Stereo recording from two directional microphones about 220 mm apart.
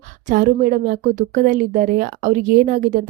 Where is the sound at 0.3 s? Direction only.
40° right (ahead or behind).